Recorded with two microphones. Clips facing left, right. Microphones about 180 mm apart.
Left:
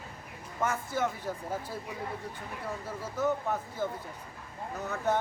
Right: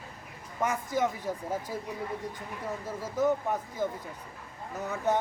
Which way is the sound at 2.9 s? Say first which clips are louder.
Right 3 dB; 10° right (ahead or behind).